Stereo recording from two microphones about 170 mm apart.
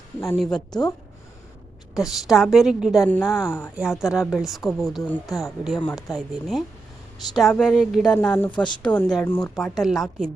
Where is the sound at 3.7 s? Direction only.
5° right (ahead or behind).